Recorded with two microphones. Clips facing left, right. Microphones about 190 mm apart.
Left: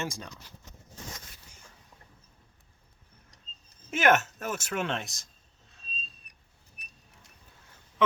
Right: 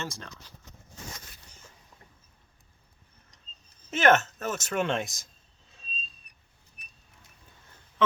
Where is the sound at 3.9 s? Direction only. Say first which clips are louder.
Right 2 dB; 10° left (ahead or behind).